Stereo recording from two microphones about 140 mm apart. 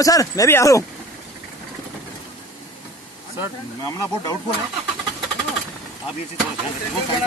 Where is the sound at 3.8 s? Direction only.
25° left (ahead or behind).